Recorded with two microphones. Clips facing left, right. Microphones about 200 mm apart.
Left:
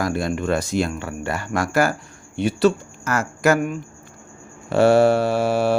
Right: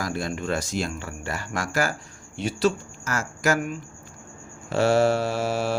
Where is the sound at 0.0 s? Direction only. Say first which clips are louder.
Left 6 dB; 60° left (ahead or behind).